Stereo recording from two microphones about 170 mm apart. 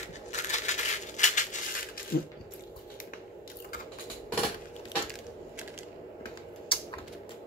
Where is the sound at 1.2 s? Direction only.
45° left (ahead or behind).